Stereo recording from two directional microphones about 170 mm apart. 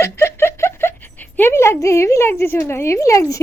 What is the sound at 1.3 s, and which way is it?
A woman's voice, 15° left (ahead or behind).